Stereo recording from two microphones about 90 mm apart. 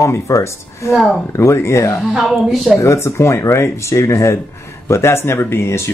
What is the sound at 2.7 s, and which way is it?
Speech, 30° left (ahead or behind).